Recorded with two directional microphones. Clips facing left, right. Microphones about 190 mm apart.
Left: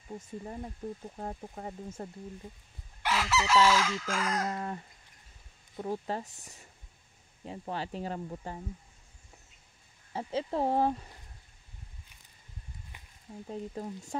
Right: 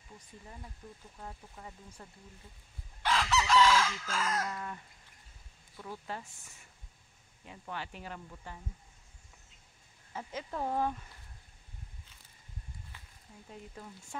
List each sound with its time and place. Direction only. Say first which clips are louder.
0.4 s speech: left 9 dB; 45° left (ahead or behind)
3.0 s chicken: left 1 dB; 10° left (ahead or behind)
4.5 s speech: left 5 dB; 35° left (ahead or behind)
5.8 s speech: left 8 dB; 40° left (ahead or behind)
10.1 s speech: left 7 dB; 30° left (ahead or behind)
12.9 s a sound: left 1 dB; 15° left (ahead or behind)
13.5 s speech: left 10 dB; 35° left (ahead or behind)